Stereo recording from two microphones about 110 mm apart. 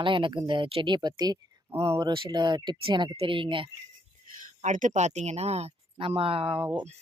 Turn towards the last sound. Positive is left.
turn(degrees=-15)  # may be behind; listen again after turning